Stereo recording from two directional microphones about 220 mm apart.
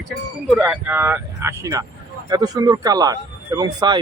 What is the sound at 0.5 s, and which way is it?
Speech, 5° right (ahead or behind).